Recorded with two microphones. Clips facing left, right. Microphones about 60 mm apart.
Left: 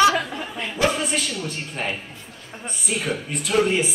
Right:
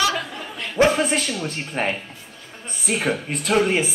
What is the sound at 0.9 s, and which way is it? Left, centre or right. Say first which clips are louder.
A woman's voice: right 4 dB; right.